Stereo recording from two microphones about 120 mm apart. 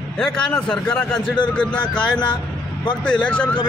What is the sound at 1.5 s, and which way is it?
Speech, 10° left (ahead or behind).